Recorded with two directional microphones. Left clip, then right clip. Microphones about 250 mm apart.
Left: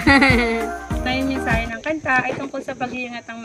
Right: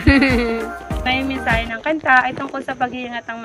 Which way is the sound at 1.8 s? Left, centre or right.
Left.